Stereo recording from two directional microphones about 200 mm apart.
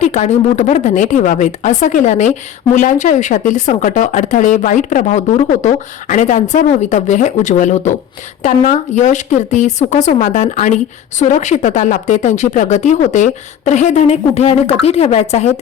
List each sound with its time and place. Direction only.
0.0 s speech: 35° left (ahead or behind)